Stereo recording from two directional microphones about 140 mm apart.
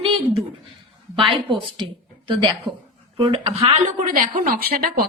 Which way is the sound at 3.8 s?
70° right (ahead or behind).